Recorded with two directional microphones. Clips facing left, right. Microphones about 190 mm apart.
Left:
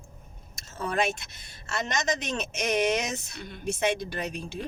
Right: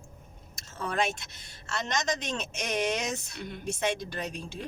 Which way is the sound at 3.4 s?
15° right (ahead or behind).